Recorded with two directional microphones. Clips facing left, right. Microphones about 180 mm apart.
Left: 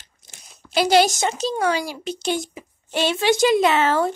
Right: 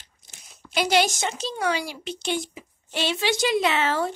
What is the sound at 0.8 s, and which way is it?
A woman's voice, 35° left (ahead or behind).